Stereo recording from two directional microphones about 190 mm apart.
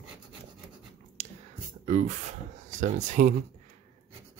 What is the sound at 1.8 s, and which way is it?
Speech, 40° right (ahead or behind).